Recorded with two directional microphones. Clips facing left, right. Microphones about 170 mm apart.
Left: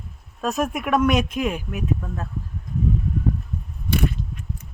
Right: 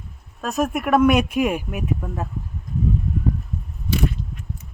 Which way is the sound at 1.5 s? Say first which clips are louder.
Right 2 dB; 55° right (ahead or behind).